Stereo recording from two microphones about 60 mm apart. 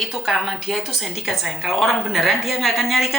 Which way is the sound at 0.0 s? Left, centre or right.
Centre.